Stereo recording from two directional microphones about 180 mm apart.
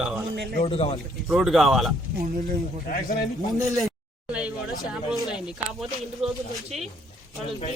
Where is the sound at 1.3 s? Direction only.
Centre (ahead or behind).